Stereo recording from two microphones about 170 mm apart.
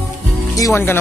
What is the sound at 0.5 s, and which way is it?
Speech, 15° left (ahead or behind).